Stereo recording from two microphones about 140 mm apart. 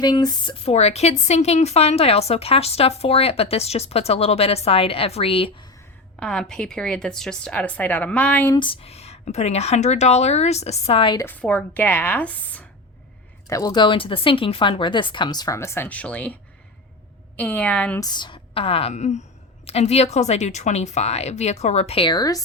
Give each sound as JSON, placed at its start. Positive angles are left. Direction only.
{"t": 0.0, "sound": "speech", "side_deg": 30}
{"t": 0.6, "sound": "a woman's voice", "side_deg": 50}
{"t": 6.1, "sound": "a woman's voice", "side_deg": 5}
{"t": 8.5, "sound": "a woman's voice", "side_deg": 40}
{"t": 11.2, "sound": "a woman's voice", "side_deg": 10}
{"t": 13.5, "sound": "a woman's voice", "side_deg": 25}
{"t": 18.0, "sound": "a woman's voice", "side_deg": 30}